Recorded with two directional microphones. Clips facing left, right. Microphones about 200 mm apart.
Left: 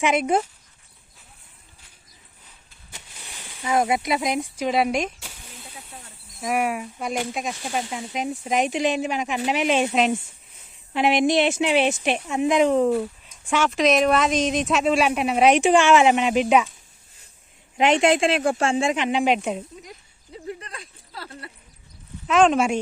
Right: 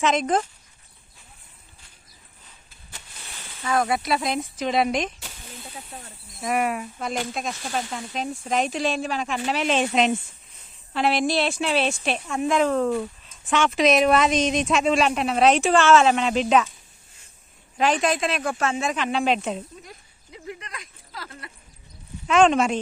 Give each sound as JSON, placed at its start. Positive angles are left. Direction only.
{"t": 0.0, "sound": "speech", "side_deg": 10}
{"t": 2.9, "sound": "speech", "side_deg": 15}
{"t": 6.4, "sound": "speech", "side_deg": 5}
{"t": 10.9, "sound": "speech", "side_deg": 15}
{"t": 17.7, "sound": "speech", "side_deg": 25}
{"t": 20.3, "sound": "speech", "side_deg": 35}
{"t": 22.3, "sound": "speech", "side_deg": 0}